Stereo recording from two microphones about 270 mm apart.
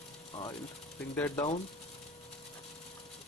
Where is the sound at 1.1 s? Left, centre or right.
Centre.